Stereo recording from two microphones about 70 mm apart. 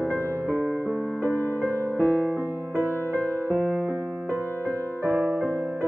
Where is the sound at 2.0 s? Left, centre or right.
Right.